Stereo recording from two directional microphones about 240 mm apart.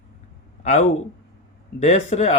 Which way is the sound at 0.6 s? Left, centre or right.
Left.